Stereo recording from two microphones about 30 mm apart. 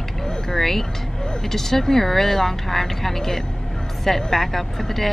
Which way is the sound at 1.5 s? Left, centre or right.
Centre.